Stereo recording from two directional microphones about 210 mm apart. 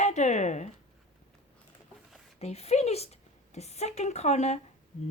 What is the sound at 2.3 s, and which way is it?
A woman's voice, 30° left (ahead or behind).